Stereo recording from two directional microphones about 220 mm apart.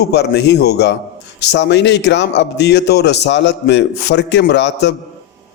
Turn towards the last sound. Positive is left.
turn(degrees=55)  # may be behind; listen again after turning